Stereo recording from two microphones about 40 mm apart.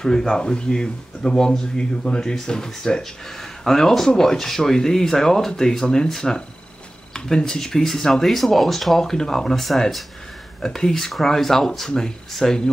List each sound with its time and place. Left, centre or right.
0.0 s speech: centre